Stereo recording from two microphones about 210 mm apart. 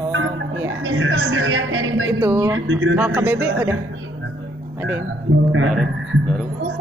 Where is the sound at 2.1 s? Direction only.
10° right (ahead or behind).